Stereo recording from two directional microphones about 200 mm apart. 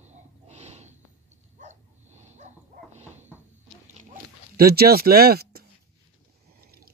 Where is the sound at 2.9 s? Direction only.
35° right (ahead or behind).